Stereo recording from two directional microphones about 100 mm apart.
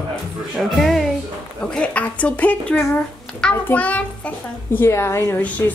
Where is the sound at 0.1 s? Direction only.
Centre (ahead or behind).